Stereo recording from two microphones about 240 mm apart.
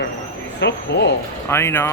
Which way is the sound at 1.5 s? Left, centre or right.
Centre.